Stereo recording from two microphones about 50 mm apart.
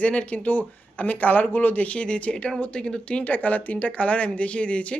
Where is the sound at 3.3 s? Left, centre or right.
Left.